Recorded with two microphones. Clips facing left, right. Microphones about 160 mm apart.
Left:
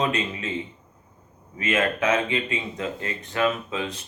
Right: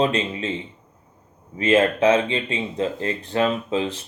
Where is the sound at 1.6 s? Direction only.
30° right (ahead or behind).